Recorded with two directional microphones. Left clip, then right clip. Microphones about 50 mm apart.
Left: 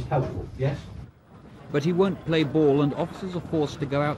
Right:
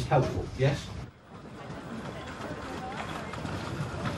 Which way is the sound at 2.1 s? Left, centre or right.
Right.